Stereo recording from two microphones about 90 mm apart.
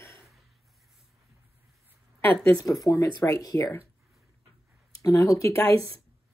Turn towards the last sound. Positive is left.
turn(degrees=35)  # may be behind; listen again after turning